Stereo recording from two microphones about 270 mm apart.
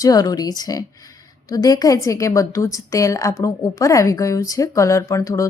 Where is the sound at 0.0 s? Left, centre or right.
Centre.